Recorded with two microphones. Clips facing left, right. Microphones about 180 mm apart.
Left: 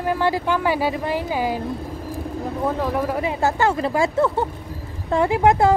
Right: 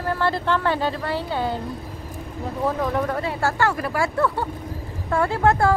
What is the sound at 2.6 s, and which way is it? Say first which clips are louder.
Speech: even; 5° left (ahead or behind).